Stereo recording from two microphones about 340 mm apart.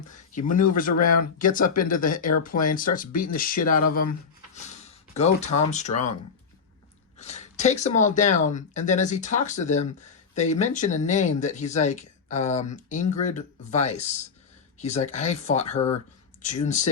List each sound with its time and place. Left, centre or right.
0.5 s speech: left
4.5 s a sound: centre
5.7 s speech: centre
7.2 s speech: centre